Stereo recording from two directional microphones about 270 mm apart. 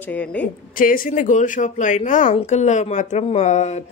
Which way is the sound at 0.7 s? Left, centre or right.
Left.